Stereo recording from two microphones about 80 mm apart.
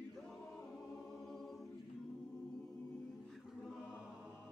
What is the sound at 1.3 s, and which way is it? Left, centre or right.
Choir, centre.